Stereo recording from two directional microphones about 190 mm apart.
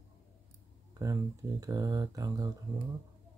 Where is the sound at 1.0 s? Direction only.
15° right (ahead or behind).